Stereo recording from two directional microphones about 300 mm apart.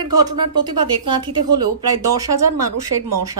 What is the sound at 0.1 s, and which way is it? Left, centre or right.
Speech, centre.